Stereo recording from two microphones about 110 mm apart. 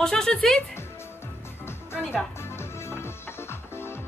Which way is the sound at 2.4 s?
20° left (ahead or behind).